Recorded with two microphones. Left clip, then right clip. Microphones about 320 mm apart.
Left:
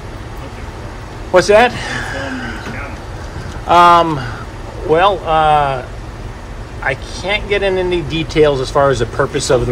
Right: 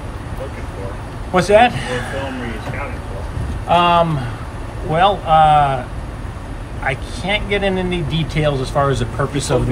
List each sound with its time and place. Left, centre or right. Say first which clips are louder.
1.3 s speech: left 3 dB; centre
3.6 s speech: left 5 dB; centre
6.8 s speech: left 3 dB; centre